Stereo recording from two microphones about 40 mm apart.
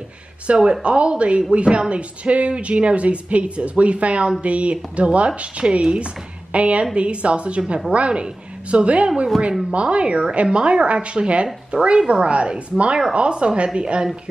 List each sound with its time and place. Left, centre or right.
0.6 s a woman's voice: right